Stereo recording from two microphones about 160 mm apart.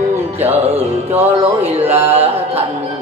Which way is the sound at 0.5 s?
40° right (ahead or behind).